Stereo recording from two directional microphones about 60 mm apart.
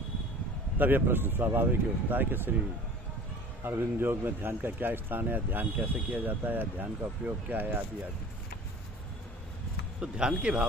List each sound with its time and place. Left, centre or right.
0.7 s speech: right
3.6 s speech: right
9.9 s speech: centre